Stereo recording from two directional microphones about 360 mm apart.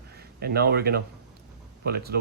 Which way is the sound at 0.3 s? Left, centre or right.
Right.